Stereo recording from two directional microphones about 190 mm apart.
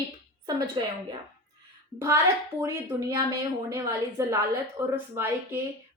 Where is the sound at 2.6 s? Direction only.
15° right (ahead or behind).